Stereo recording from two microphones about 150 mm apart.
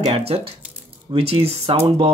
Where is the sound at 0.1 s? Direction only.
40° right (ahead or behind).